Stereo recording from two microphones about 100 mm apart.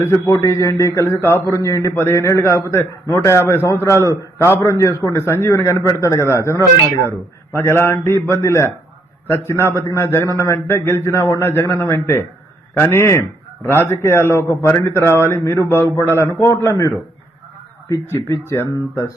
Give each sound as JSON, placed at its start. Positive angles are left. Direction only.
{"t": 0.0, "sound": "a man's voice", "side_deg": 30}